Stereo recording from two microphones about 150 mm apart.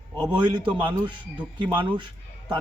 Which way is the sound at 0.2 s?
30° right (ahead or behind).